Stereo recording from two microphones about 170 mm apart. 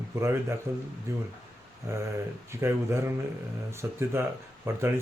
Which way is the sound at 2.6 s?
15° right (ahead or behind).